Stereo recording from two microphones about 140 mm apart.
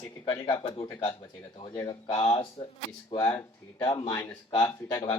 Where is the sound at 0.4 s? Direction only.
40° left (ahead or behind).